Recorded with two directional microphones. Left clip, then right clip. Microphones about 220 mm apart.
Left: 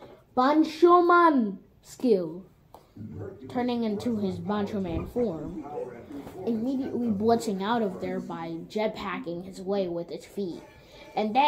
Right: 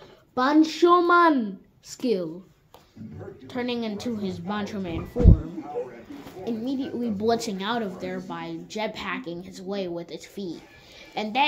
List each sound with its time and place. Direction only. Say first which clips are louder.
0.3 s a woman's voice: right 2 dB; 30° right (ahead or behind)
3.4 s a woman's voice: even; 30° right (ahead or behind)
6.4 s a woman's voice: even; 35° right (ahead or behind)